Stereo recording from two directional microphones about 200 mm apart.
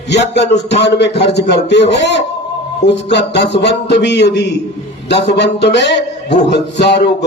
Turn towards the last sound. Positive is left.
turn(degrees=55)  # may be behind; listen again after turning